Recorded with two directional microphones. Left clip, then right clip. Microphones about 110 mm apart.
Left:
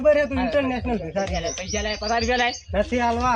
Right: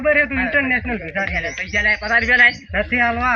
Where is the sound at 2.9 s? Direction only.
45° left (ahead or behind).